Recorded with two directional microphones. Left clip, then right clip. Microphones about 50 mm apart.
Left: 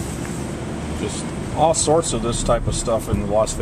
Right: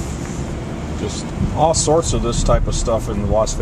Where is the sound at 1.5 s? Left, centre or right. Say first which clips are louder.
Right 1 dB; right.